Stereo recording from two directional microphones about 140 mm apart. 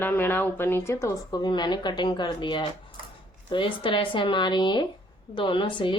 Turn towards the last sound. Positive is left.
turn(degrees=35)  # may be behind; listen again after turning